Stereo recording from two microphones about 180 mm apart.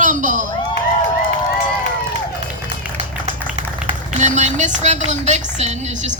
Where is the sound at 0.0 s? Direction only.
45° right (ahead or behind).